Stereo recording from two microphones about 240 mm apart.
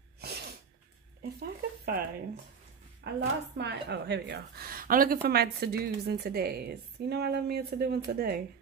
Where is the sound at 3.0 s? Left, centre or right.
Right.